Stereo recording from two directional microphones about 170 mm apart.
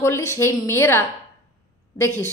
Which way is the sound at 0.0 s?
15° left (ahead or behind).